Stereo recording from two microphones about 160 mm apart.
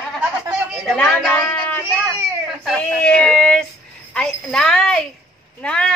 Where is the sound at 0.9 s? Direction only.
5° left (ahead or behind).